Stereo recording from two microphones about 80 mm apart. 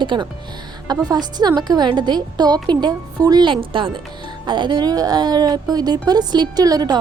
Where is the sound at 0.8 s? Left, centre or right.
Right.